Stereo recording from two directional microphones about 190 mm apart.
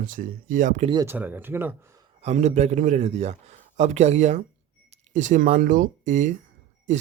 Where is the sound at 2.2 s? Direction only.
35° right (ahead or behind).